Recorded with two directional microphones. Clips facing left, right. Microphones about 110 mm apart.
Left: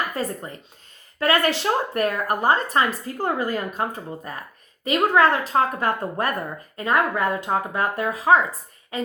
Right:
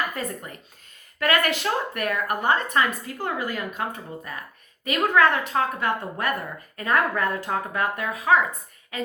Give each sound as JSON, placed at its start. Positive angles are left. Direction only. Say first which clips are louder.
{"t": 0.1, "sound": "speech", "louder": "left 4 dB", "side_deg": 30}
{"t": 6.7, "sound": "speech", "louder": "left 2 dB", "side_deg": 25}